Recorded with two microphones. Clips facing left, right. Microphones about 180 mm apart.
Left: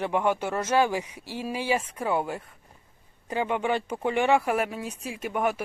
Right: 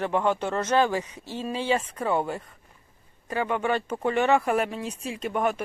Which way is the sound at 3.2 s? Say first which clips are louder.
Even; 15° left (ahead or behind).